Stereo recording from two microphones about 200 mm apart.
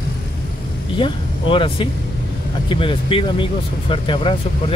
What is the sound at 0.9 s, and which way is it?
Speech, 25° left (ahead or behind).